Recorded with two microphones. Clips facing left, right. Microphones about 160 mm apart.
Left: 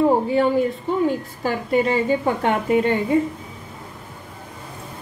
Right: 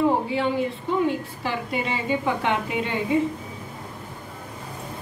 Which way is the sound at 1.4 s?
45° left (ahead or behind).